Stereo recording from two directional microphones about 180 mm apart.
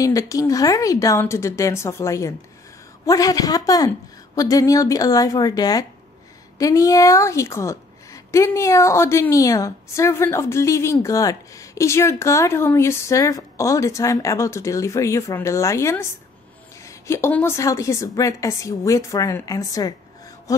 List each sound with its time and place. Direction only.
0.0 s a woman's voice: 20° left (ahead or behind)